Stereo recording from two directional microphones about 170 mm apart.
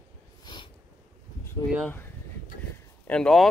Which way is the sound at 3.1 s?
5° left (ahead or behind).